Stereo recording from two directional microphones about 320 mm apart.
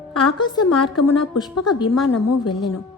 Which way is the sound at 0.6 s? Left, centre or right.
Left.